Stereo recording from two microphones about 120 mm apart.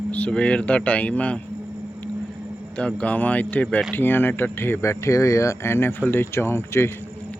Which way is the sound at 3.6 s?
Centre (ahead or behind).